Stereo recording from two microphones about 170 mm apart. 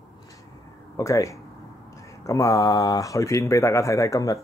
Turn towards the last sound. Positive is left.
turn(degrees=20)  # may be behind; listen again after turning